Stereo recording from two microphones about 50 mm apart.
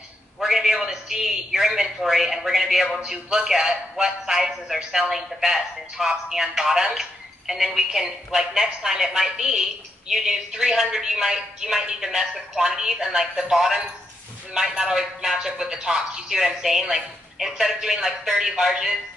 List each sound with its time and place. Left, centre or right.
0.4 s a man's voice: centre